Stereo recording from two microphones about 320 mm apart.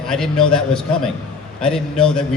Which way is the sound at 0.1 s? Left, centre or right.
Centre.